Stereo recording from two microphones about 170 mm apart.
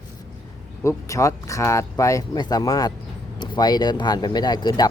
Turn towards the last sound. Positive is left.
turn(degrees=25)  # may be behind; listen again after turning